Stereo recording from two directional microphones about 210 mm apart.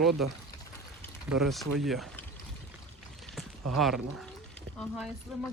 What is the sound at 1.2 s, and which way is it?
Speech, centre (ahead or behind).